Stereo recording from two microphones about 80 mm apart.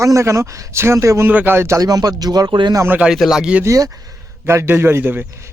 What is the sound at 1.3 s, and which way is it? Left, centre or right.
Speech, right.